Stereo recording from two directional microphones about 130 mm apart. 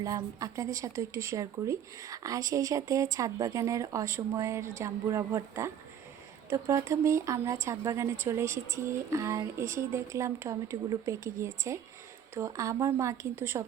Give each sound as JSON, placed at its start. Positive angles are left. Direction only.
{"t": 0.0, "sound": "speech", "side_deg": -25}